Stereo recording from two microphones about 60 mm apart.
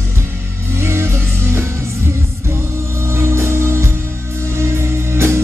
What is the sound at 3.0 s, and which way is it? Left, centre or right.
Music, right.